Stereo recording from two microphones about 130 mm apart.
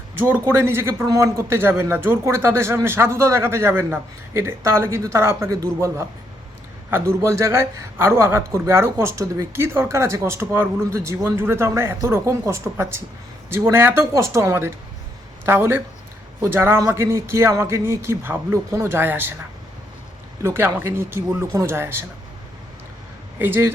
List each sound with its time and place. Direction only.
0.2 s speech: 15° right (ahead or behind)
6.9 s speech: 20° right (ahead or behind)
20.4 s speech: 20° right (ahead or behind)
23.4 s speech: 20° right (ahead or behind)